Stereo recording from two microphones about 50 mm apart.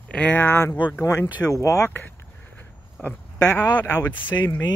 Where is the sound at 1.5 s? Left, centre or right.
Left.